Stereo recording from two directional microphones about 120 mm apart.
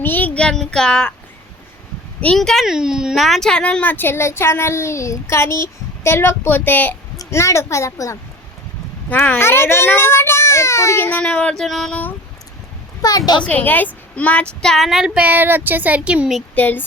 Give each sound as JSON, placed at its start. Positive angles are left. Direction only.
{"t": 0.0, "sound": "speech", "side_deg": 15}
{"t": 2.2, "sound": "a child's voice", "side_deg": 5}
{"t": 9.0, "sound": "a child's voice", "side_deg": 15}
{"t": 11.2, "sound": "speech", "side_deg": 10}
{"t": 13.0, "sound": "a child's voice", "side_deg": 30}
{"t": 13.4, "sound": "a woman's voice", "side_deg": 15}
{"t": 16.6, "sound": "speech", "side_deg": 15}